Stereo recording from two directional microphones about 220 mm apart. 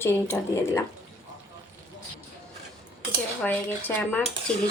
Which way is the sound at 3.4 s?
5° left (ahead or behind).